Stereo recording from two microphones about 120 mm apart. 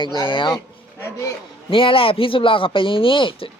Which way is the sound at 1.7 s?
45° left (ahead or behind).